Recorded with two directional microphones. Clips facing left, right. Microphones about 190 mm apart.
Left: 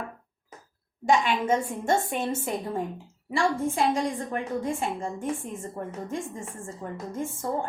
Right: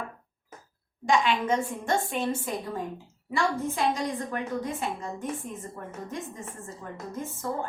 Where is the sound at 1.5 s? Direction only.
25° left (ahead or behind).